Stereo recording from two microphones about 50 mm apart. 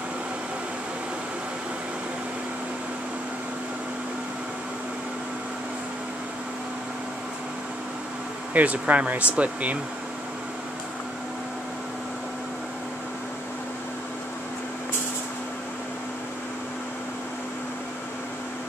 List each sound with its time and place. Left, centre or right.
8.5 s speech: right